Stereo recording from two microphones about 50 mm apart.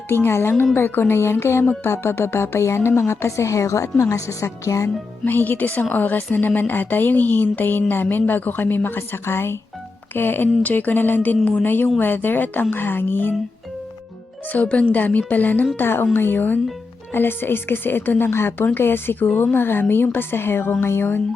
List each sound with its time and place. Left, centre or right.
0.1 s speech: left
0.5 s a woman's voice: left
5.2 s a woman's voice: left
9.0 s a woman's voice: left
10.6 s a woman's voice: left
14.5 s a woman's voice: left
18.3 s a woman's voice: left